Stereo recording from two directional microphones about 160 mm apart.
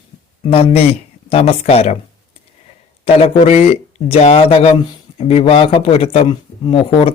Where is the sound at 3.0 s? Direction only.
40° left (ahead or behind).